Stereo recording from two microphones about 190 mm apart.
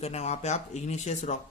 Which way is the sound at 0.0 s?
35° left (ahead or behind).